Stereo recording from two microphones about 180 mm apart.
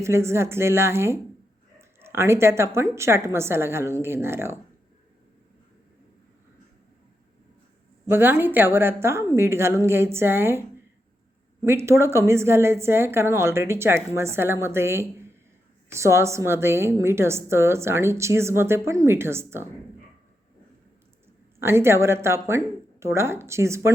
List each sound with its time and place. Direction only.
0.0 s a woman's voice: 15° right (ahead or behind)
8.1 s a woman's voice: 10° right (ahead or behind)
11.6 s a woman's voice: 15° right (ahead or behind)
21.6 s a woman's voice: 15° right (ahead or behind)